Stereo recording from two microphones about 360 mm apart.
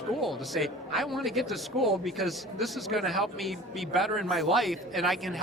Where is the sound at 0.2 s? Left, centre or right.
Centre.